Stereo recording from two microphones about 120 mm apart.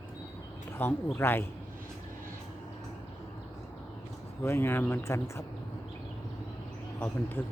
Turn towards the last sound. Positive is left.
turn(degrees=15)  # may be behind; listen again after turning